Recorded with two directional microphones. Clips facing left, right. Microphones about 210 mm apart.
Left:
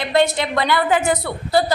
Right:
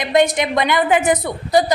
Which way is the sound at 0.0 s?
15° right (ahead or behind).